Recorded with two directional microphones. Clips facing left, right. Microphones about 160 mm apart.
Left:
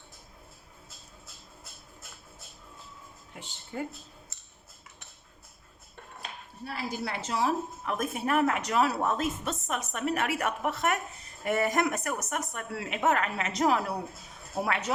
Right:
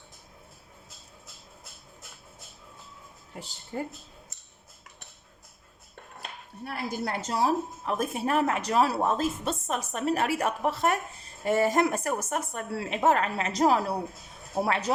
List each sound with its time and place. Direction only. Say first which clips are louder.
3.3 s a woman's voice: right 2 dB; 35° right (ahead or behind)
6.7 s a woman's voice: right 2 dB; 50° right (ahead or behind); by 14.9 s 35° right (ahead or behind)